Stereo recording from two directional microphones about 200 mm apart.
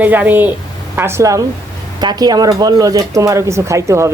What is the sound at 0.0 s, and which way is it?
Speech, 10° right (ahead or behind).